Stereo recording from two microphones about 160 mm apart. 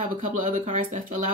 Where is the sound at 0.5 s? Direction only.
50° right (ahead or behind).